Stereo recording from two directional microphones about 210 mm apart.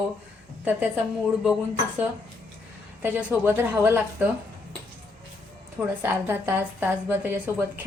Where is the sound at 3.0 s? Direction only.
10° right (ahead or behind).